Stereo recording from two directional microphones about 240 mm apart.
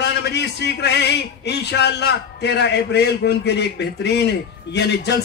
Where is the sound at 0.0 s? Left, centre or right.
Left.